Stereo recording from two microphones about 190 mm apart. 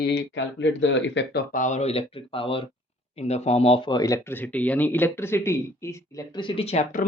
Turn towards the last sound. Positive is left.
turn(degrees=40)  # may be behind; listen again after turning